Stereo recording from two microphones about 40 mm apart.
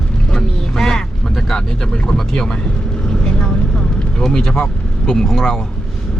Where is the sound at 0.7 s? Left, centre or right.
Centre.